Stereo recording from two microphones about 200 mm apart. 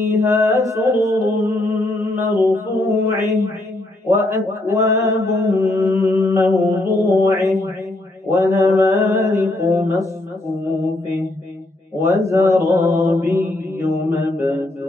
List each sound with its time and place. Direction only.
0.0 s music: 15° right (ahead or behind)
2.5 s mantra: 15° right (ahead or behind)